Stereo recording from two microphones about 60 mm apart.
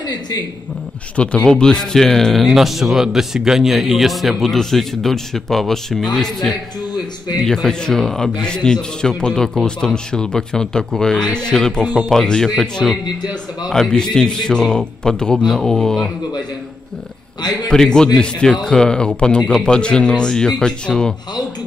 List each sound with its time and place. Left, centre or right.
1.1 s a man's voice: centre
13.7 s a man's voice: centre
17.6 s a man's voice: centre